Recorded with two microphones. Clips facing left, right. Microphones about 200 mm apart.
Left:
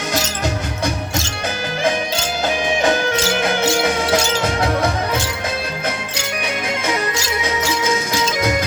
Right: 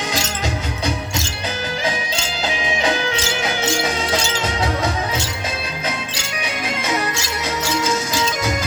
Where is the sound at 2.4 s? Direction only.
50° left (ahead or behind).